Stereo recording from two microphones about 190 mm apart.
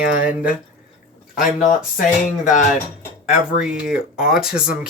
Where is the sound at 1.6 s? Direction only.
40° left (ahead or behind).